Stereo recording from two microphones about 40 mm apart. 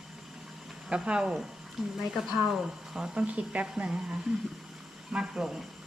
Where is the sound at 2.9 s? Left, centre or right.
Right.